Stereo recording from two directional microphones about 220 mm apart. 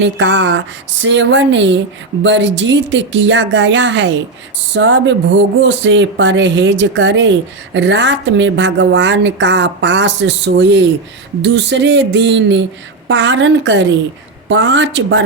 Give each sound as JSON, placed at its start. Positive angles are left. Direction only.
{"t": 0.0, "sound": "speech", "side_deg": -55}
{"t": 11.4, "sound": "a sound", "side_deg": -55}
{"t": 13.1, "sound": "speech", "side_deg": -55}